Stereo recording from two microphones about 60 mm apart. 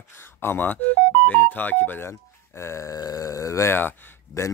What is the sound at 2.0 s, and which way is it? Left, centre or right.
Speech, left.